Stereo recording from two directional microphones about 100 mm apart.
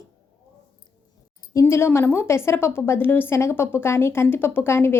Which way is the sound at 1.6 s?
25° left (ahead or behind).